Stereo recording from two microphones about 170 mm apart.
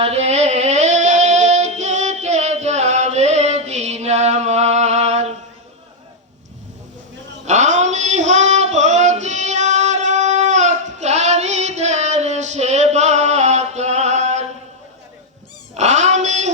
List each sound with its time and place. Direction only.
0.0 s female singing: 40° right (ahead or behind)
7.4 s female singing: 45° right (ahead or behind)
15.7 s child singing: 40° right (ahead or behind)